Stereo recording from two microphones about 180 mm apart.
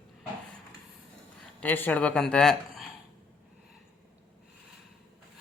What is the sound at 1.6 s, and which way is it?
Speech, 10° left (ahead or behind).